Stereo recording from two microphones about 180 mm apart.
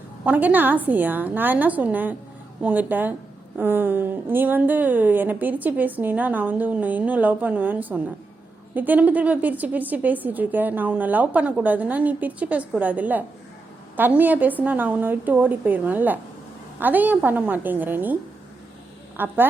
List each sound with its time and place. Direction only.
0.3 s a woman's voice: 10° right (ahead or behind)